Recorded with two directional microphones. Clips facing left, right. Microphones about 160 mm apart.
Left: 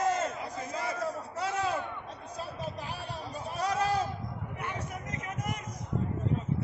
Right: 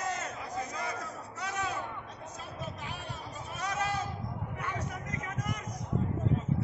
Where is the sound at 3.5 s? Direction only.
30° left (ahead or behind).